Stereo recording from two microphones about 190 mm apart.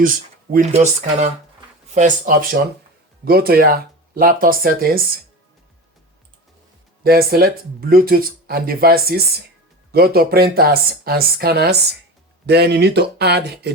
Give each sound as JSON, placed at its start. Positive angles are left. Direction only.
{"t": 0.0, "sound": "speech", "side_deg": -45}
{"t": 0.7, "sound": "speech", "side_deg": -35}
{"t": 7.0, "sound": "speech", "side_deg": -50}